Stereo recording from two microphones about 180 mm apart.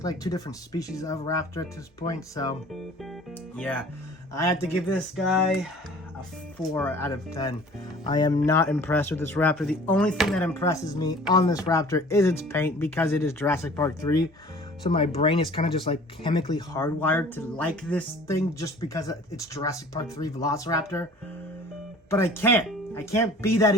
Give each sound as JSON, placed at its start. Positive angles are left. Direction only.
{"t": 0.0, "sound": "speech", "side_deg": 20}
{"t": 3.5, "sound": "speech", "side_deg": 10}
{"t": 4.9, "sound": "speech", "side_deg": 0}
{"t": 6.7, "sound": "speech", "side_deg": 10}
{"t": 10.5, "sound": "speech", "side_deg": 15}
{"t": 14.8, "sound": "speech", "side_deg": 30}
{"t": 22.1, "sound": "speech", "side_deg": 15}